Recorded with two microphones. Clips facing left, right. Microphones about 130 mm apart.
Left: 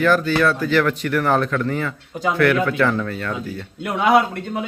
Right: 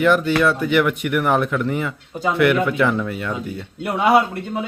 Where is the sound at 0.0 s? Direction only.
20° right (ahead or behind).